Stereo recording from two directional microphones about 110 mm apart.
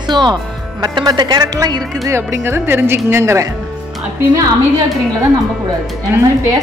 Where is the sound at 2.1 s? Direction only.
25° right (ahead or behind).